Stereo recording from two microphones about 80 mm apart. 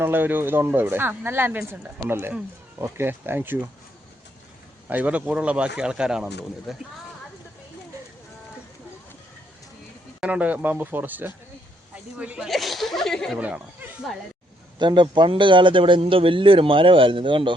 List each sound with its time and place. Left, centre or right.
0.0 s speech: right
4.9 s speech: centre
10.2 s speech: centre
12.1 s speech: centre
12.5 s speech: centre
13.4 s speech: centre
14.8 s a man's voice: right